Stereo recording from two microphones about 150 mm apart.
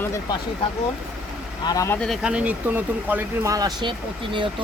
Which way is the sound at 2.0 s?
5° right (ahead or behind).